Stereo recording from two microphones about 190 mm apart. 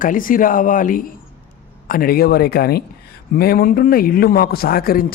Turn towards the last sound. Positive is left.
turn(degrees=50)  # may be behind; listen again after turning